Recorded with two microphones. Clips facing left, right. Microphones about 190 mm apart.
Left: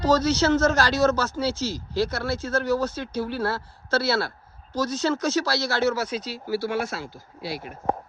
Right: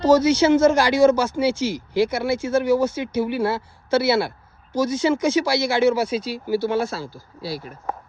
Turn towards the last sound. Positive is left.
turn(degrees=-35)  # may be behind; listen again after turning